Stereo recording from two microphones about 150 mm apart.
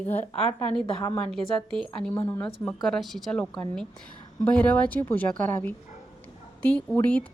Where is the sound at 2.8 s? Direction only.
Centre (ahead or behind).